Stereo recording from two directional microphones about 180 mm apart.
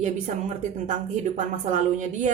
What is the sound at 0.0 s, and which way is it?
A woman's voice, 40° right (ahead or behind).